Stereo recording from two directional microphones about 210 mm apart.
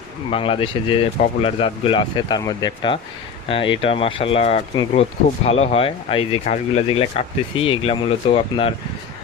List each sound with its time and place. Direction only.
0.3 s speech: 25° left (ahead or behind)